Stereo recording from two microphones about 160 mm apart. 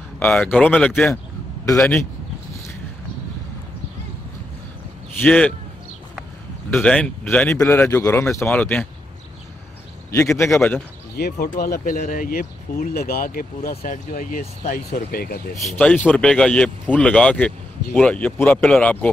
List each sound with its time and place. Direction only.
0.2 s speech: 10° left (ahead or behind)
5.2 s speech: 5° left (ahead or behind)
6.7 s speech: 5° left (ahead or behind)
10.1 s speech: 20° left (ahead or behind)
11.1 s speech: 75° left (ahead or behind)
15.7 s speech: 10° left (ahead or behind)